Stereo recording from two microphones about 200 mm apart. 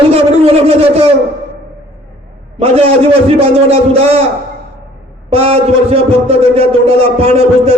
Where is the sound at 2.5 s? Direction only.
30° right (ahead or behind).